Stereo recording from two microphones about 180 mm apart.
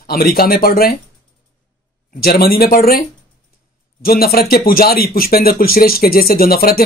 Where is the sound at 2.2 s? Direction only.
55° left (ahead or behind).